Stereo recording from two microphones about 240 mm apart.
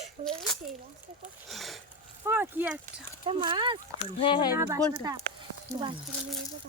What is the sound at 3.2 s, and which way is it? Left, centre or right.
Speech, right.